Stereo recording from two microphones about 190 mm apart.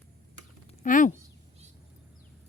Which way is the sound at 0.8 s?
45° left (ahead or behind).